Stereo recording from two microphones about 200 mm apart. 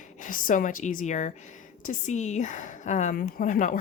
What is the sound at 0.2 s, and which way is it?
Speech, 45° left (ahead or behind).